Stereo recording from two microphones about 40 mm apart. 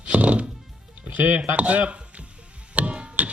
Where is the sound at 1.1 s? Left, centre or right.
Right.